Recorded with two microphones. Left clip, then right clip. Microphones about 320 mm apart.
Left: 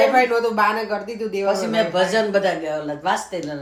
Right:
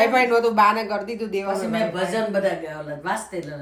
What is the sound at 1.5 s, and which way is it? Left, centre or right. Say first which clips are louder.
Speech: left 5 dB; centre.